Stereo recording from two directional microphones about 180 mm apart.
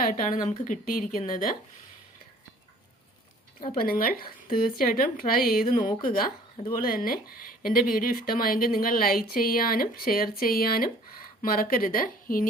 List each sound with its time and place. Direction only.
0.0 s speech: 50° left (ahead or behind)
3.7 s speech: 55° left (ahead or behind)